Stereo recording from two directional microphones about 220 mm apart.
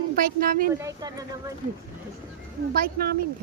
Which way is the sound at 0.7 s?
15° right (ahead or behind).